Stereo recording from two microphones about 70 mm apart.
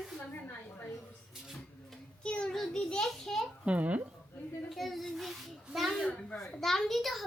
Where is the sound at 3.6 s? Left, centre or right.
Centre.